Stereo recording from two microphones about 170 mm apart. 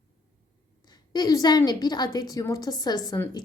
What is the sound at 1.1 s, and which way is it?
A woman's voice, 20° left (ahead or behind).